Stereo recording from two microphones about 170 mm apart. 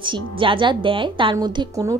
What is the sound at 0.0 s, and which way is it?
A woman's voice, 30° right (ahead or behind).